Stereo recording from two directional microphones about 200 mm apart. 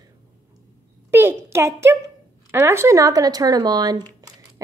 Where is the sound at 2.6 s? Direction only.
15° right (ahead or behind).